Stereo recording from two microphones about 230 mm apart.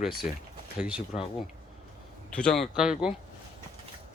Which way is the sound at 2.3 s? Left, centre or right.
Centre.